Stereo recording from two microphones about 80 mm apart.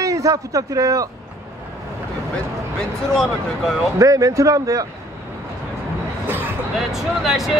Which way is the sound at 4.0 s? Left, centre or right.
Right.